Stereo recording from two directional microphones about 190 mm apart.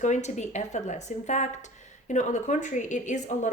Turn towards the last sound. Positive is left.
turn(degrees=40)  # may be behind; listen again after turning